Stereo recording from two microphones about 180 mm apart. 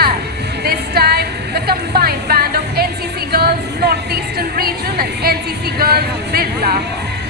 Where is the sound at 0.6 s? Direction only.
60° right (ahead or behind).